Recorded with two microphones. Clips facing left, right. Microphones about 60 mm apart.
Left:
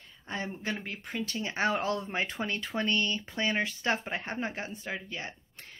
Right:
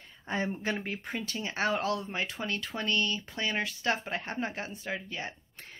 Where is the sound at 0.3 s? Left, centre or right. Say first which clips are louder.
Right 3 dB; centre.